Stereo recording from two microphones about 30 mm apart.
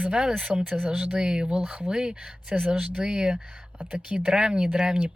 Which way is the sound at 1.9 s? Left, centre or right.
Right.